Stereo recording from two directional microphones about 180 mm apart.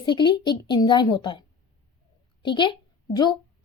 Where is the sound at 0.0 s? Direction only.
25° left (ahead or behind).